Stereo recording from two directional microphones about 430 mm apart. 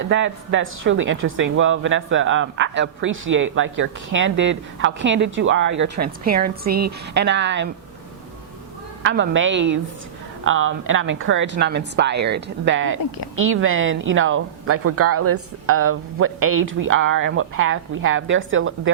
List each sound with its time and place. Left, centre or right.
0.1 s speech: right
9.0 s speech: right
13.0 s speech: left
13.3 s speech: right